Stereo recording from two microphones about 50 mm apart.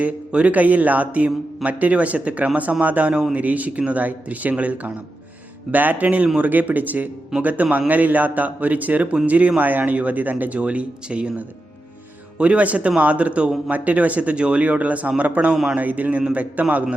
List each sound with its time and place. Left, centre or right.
0.0 s speech: right